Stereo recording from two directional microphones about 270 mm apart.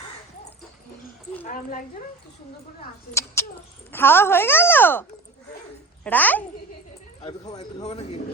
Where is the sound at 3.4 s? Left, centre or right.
Centre.